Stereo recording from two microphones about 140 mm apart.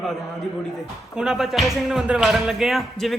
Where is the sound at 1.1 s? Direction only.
5° right (ahead or behind).